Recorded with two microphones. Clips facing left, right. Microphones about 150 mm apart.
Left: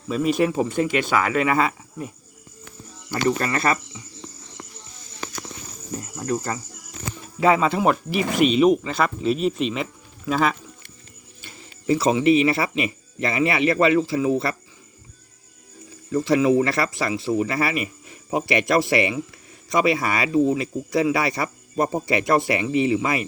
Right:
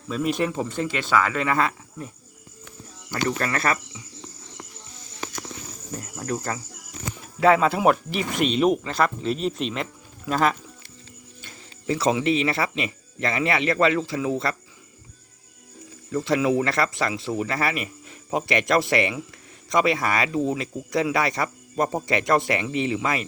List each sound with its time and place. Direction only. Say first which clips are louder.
0.1 s speech: left 4 dB; 5° left (ahead or behind)
3.1 s speech: left 4 dB; 15° left (ahead or behind)
3.4 s speech: left 2 dB; centre (ahead or behind)
6.1 s speech: left 3 dB; centre (ahead or behind)
7.1 s music: even; centre (ahead or behind)
8.3 s speech: left 4 dB; 5° left (ahead or behind)
16.2 s speech: left 4 dB; centre (ahead or behind)